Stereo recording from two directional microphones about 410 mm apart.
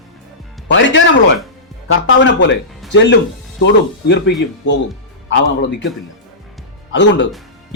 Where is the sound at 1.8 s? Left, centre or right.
Left.